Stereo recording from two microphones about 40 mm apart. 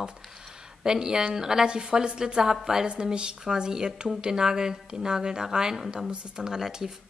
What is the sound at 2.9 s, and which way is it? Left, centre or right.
Speech, right.